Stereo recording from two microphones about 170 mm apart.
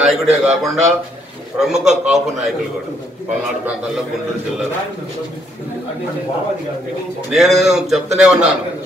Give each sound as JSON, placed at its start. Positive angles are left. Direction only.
{"t": 0.0, "sound": "a man's voice", "side_deg": 0}
{"t": 7.2, "sound": "a man's voice", "side_deg": 0}